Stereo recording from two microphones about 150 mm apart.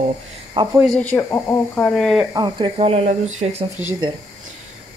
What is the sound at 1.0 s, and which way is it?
Speech, 10° left (ahead or behind).